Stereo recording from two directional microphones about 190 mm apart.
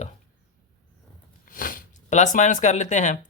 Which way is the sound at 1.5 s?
45° left (ahead or behind).